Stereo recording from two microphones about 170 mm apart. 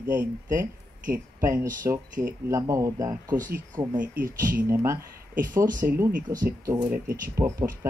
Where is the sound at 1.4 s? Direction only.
15° right (ahead or behind).